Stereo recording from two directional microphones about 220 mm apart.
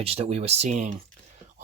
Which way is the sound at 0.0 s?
25° right (ahead or behind).